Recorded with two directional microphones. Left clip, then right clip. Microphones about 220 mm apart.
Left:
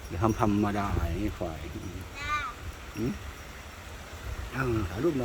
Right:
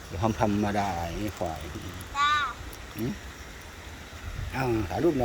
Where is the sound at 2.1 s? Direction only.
Centre (ahead or behind).